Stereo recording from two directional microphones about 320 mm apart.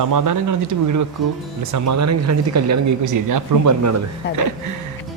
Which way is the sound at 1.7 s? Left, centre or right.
Right.